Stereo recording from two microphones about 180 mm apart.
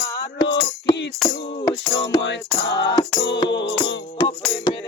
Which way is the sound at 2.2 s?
80° left.